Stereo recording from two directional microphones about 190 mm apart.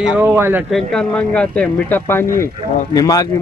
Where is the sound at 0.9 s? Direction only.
5° left (ahead or behind).